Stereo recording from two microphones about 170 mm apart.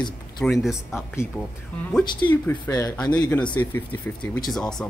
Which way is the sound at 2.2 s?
20° left (ahead or behind).